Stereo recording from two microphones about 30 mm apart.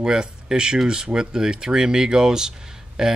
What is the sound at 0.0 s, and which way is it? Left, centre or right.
Speech, right.